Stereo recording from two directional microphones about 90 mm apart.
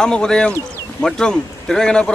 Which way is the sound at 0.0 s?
10° left (ahead or behind).